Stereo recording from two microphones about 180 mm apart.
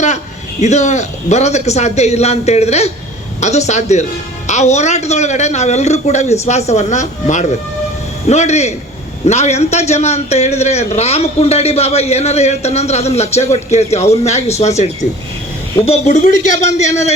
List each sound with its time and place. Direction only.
0.6 s a man's voice: 40° left (ahead or behind)